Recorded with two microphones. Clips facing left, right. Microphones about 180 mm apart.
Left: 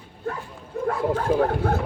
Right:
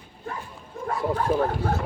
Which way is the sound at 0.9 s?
70° left (ahead or behind).